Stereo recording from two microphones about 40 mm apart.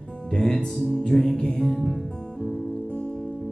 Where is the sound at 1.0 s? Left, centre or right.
Centre.